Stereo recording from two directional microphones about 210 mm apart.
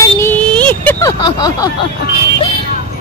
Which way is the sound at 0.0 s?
10° left (ahead or behind).